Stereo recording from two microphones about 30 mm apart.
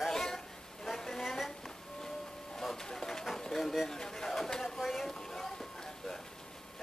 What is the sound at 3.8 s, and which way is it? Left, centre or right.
Chatter, centre.